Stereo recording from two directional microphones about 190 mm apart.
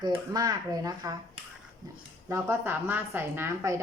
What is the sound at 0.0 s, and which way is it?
A woman's voice, 20° right (ahead or behind).